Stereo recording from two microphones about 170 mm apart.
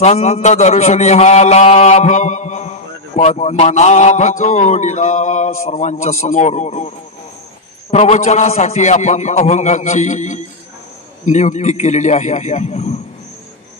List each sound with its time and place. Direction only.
0.0 s a man's voice: 40° left (ahead or behind)
7.9 s a man's voice: 40° left (ahead or behind)